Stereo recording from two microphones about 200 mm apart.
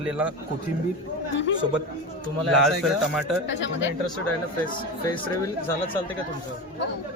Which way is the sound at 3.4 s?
65° left (ahead or behind).